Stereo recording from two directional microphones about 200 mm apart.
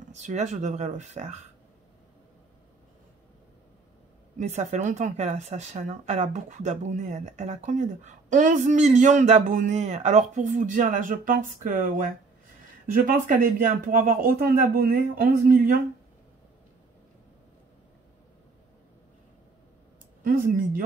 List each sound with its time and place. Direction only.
0.1 s speech: 35° right (ahead or behind)
4.4 s speech: 35° right (ahead or behind)
20.2 s speech: 45° right (ahead or behind)